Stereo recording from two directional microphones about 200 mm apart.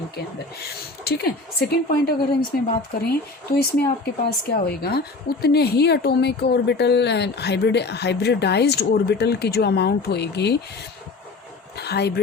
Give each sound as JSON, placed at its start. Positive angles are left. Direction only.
{"t": 0.2, "sound": "a woman's voice", "side_deg": 50}
{"t": 11.8, "sound": "a woman's voice", "side_deg": 55}